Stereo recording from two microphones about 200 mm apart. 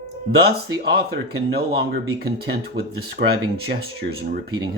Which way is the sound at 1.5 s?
55° right (ahead or behind).